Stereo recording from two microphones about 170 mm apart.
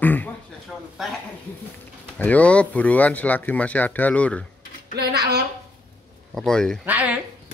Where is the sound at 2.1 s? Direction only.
10° left (ahead or behind).